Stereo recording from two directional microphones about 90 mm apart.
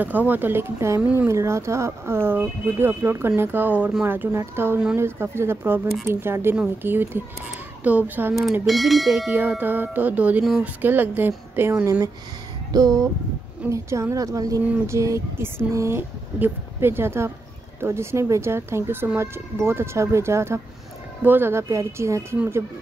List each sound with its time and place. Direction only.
0.0 s speech: 20° right (ahead or behind)
8.6 s speech: centre (ahead or behind)
9.3 s speech: 20° right (ahead or behind)
11.8 s a woman's voice: 35° right (ahead or behind)
13.7 s a woman's voice: 30° right (ahead or behind)